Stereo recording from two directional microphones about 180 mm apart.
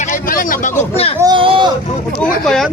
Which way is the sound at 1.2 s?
25° right (ahead or behind).